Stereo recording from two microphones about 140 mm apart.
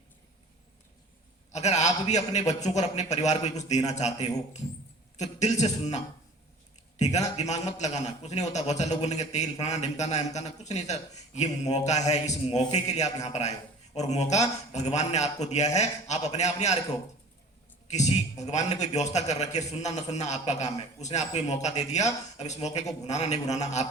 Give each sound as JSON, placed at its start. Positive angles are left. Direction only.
{"t": 1.5, "sound": "a man's voice", "side_deg": 55}
{"t": 7.0, "sound": "a man's voice", "side_deg": 55}
{"t": 17.8, "sound": "a man's voice", "side_deg": 55}